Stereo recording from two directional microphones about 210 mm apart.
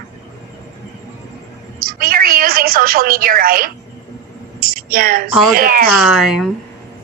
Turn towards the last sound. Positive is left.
turn(degrees=0)  # may be behind; listen again after turning